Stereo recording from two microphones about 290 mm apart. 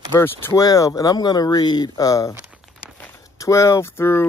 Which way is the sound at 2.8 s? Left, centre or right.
Centre.